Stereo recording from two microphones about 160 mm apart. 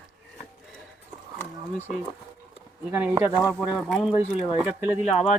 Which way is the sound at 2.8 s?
10° right (ahead or behind).